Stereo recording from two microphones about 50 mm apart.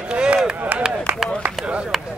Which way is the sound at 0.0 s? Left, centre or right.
Right.